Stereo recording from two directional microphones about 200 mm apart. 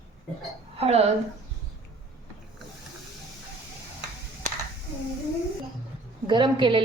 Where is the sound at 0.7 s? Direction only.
30° right (ahead or behind).